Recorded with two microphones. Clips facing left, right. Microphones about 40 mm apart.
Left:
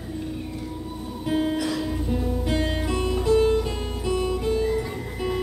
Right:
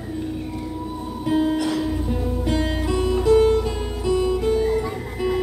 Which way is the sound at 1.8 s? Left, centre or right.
Centre.